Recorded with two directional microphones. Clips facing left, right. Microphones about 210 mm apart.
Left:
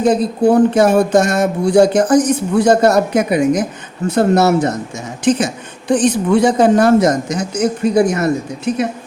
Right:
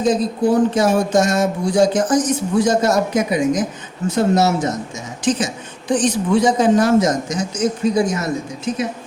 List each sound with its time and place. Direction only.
0.0 s speech: 60° left (ahead or behind)